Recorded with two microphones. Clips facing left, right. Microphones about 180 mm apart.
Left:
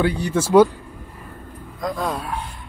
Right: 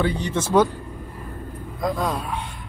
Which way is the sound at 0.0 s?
10° left (ahead or behind).